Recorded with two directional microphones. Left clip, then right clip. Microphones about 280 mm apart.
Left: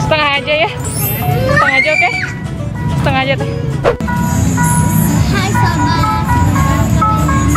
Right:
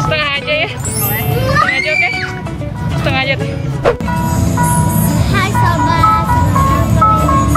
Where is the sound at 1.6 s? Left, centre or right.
Centre.